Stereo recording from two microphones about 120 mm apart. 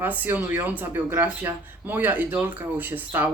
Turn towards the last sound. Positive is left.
turn(degrees=-15)  # may be behind; listen again after turning